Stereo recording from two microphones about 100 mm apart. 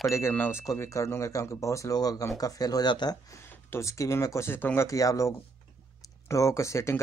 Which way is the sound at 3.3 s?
30° left (ahead or behind).